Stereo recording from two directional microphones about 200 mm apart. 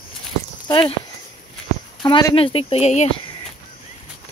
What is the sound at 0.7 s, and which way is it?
Speech, 25° left (ahead or behind).